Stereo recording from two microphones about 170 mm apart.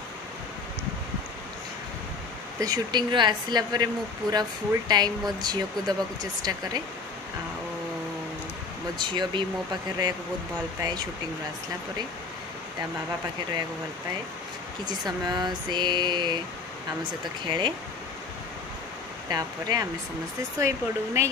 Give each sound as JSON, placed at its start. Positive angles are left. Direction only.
{"t": 2.6, "sound": "speech", "side_deg": -25}
{"t": 8.9, "sound": "speech", "side_deg": -25}
{"t": 14.9, "sound": "speech", "side_deg": -25}
{"t": 17.5, "sound": "speech", "side_deg": -25}
{"t": 19.2, "sound": "speech", "side_deg": -20}